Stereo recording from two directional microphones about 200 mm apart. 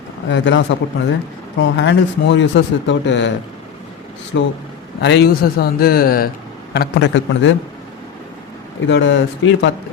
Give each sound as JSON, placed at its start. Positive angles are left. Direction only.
{"t": 0.3, "sound": "speech", "side_deg": 65}
{"t": 4.3, "sound": "a man's voice", "side_deg": 65}
{"t": 6.7, "sound": "speech", "side_deg": 60}
{"t": 8.9, "sound": "speech", "side_deg": 70}